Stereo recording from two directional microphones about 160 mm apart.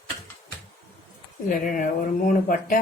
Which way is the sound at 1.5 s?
55° left (ahead or behind).